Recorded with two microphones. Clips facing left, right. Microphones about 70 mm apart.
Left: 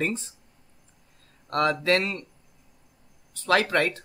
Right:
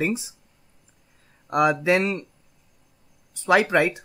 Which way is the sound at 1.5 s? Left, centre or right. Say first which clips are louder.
Right 3 dB; centre.